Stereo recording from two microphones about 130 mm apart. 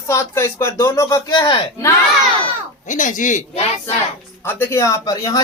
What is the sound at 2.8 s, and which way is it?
Speech, 75° left (ahead or behind).